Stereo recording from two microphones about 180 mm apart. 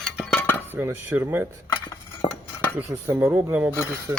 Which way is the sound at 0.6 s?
10° right (ahead or behind).